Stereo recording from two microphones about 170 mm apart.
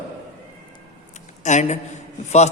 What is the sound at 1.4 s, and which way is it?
A man's voice, 45° left (ahead or behind).